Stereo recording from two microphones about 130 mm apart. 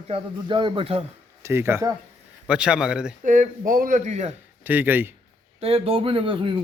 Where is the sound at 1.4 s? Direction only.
20° right (ahead or behind).